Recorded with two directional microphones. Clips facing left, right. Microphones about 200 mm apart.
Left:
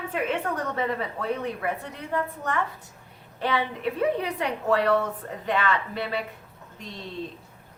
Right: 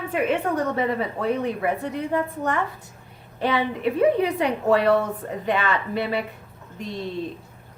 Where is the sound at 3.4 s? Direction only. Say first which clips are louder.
Right 3 dB; 15° right (ahead or behind).